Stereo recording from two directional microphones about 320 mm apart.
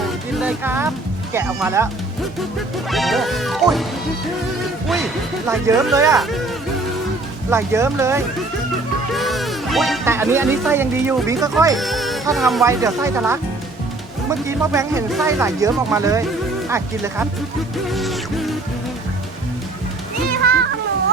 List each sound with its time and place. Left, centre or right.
0.3 s speech: centre
2.9 s music: centre
5.5 s speech: centre
7.5 s speech: centre
11.8 s speech: centre
17.9 s music: centre